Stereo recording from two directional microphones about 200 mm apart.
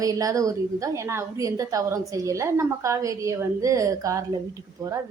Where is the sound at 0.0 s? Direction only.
15° right (ahead or behind).